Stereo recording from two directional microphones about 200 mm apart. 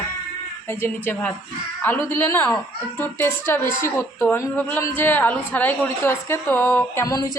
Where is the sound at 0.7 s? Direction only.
10° left (ahead or behind).